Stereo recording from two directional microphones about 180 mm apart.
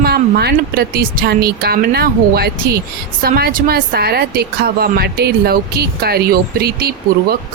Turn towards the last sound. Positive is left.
turn(degrees=-60)  # may be behind; listen again after turning